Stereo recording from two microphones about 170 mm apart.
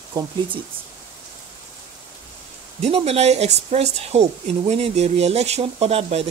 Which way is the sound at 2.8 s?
35° right (ahead or behind).